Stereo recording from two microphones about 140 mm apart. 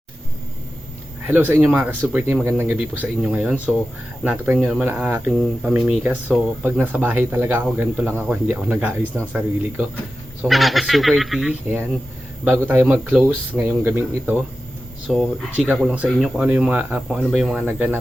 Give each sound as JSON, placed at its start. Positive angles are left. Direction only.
{"t": 1.3, "sound": "speech", "side_deg": -15}
{"t": 10.4, "sound": "speech", "side_deg": 0}
{"t": 12.5, "sound": "speech", "side_deg": -15}
{"t": 15.0, "sound": "speech", "side_deg": 0}
{"t": 15.6, "sound": "speech", "side_deg": -10}
{"t": 17.7, "sound": "speech", "side_deg": -15}